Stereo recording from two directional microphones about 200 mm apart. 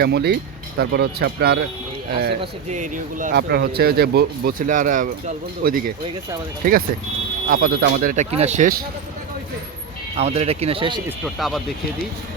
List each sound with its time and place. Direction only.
0.0 s speech: 55° right (ahead or behind)
2.4 s speech: 35° right (ahead or behind)
7.4 s speech: 45° right (ahead or behind)
10.2 s speech: 30° right (ahead or behind)
11.3 s speech: centre (ahead or behind)